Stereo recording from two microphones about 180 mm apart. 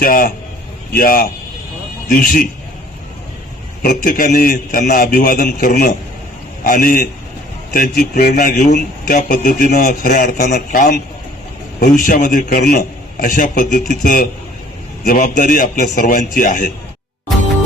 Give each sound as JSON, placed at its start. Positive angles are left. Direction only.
{"t": 0.0, "sound": "a man's voice", "side_deg": 50}
{"t": 3.8, "sound": "a man's voice", "side_deg": 50}